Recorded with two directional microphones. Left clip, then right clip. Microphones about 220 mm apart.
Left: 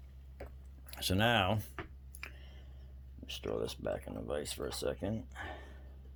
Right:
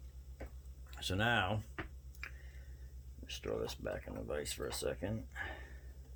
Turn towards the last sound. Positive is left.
turn(degrees=25)  # may be behind; listen again after turning